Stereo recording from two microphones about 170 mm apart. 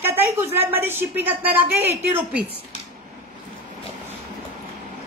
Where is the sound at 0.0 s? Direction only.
15° right (ahead or behind).